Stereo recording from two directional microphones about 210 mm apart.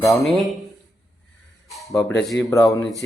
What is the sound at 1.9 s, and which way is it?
Speech, 15° left (ahead or behind).